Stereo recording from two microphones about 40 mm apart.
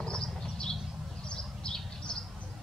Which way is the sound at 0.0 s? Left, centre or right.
Centre.